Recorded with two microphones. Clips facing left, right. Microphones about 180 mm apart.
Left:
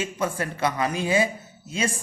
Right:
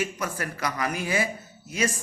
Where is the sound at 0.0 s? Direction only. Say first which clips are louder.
Left 3 dB; 25° left (ahead or behind).